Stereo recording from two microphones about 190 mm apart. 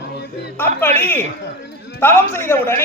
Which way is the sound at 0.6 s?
10° left (ahead or behind).